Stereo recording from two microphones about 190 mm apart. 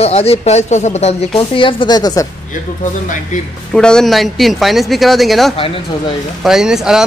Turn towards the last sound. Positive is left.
turn(degrees=-5)  # may be behind; listen again after turning